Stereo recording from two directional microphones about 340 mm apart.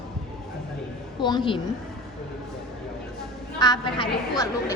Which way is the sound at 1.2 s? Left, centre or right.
Centre.